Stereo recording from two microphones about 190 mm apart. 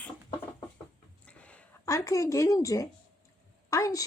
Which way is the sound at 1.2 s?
5° left (ahead or behind).